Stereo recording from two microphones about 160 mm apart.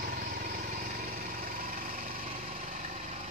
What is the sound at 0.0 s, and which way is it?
Lawn mower, 60° right (ahead or behind).